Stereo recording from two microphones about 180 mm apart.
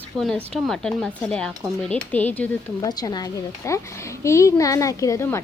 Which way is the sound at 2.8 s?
20° left (ahead or behind).